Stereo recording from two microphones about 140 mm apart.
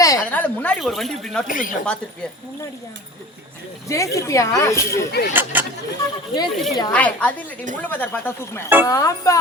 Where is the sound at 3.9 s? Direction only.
20° left (ahead or behind).